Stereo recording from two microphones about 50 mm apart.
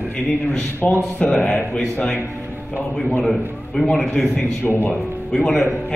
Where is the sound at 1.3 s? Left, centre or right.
Centre.